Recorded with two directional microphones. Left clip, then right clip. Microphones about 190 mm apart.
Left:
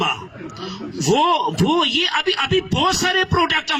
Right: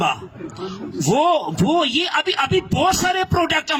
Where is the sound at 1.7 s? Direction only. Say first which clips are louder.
Right 1 dB; 65° right (ahead or behind).